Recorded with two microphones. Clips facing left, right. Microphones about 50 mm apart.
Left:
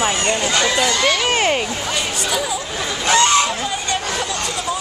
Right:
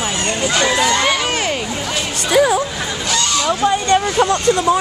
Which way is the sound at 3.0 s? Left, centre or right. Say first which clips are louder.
Left 4 dB; left.